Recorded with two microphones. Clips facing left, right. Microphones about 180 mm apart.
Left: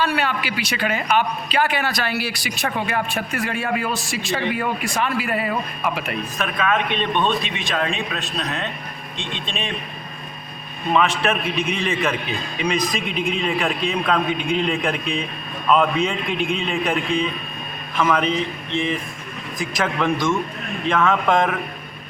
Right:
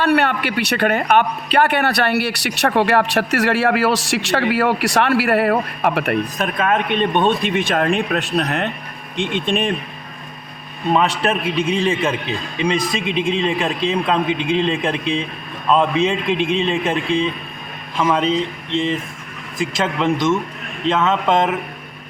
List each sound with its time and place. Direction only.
0.0 s speech: 60° right (ahead or behind)
6.4 s a man's voice: 45° right (ahead or behind)
10.9 s a man's voice: 35° right (ahead or behind)
19.7 s a man's voice: 25° right (ahead or behind)